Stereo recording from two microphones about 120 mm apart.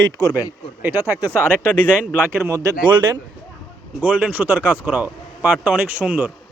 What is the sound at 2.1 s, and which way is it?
Speech, 20° right (ahead or behind).